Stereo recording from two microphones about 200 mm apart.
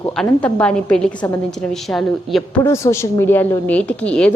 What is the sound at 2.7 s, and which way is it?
A woman's voice, 15° left (ahead or behind).